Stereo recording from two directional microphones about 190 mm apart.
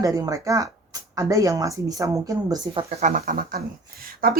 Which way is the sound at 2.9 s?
40° right (ahead or behind).